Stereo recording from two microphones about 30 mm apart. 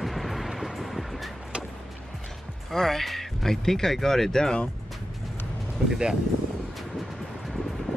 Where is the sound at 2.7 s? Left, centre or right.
Centre.